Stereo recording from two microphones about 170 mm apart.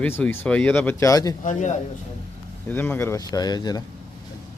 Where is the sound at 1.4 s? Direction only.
45° left (ahead or behind).